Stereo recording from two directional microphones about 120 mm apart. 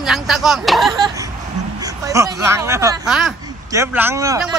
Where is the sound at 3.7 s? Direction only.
20° right (ahead or behind).